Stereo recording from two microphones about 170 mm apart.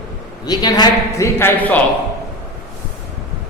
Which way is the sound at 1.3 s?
10° left (ahead or behind).